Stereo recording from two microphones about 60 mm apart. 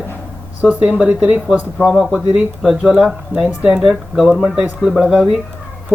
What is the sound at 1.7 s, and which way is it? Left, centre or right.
Speech, centre.